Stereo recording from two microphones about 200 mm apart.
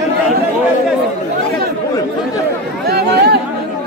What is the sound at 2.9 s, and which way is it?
Speech, 55° right (ahead or behind).